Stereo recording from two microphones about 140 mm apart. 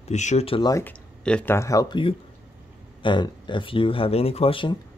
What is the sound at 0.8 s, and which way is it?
Speech, 5° left (ahead or behind).